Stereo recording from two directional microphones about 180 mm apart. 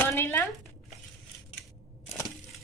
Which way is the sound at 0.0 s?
10° left (ahead or behind).